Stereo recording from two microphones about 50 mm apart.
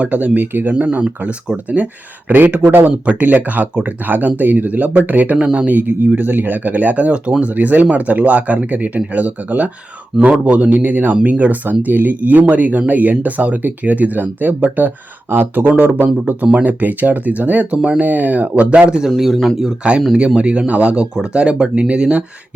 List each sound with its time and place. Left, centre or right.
0.0 s speech: right
0.7 s speech: right
5.7 s speech: right
7.5 s speech: right
16.1 s speech: right
19.1 s a man's voice: centre
20.1 s speech: right